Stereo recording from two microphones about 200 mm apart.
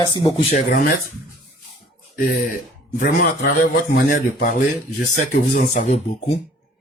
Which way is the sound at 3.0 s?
55° left (ahead or behind).